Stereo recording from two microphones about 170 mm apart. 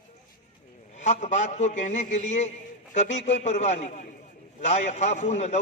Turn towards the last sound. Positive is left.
turn(degrees=40)  # may be behind; listen again after turning